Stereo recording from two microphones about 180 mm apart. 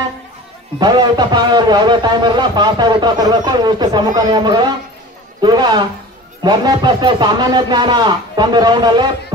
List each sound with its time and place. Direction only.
0.7 s a man's voice: 25° right (ahead or behind)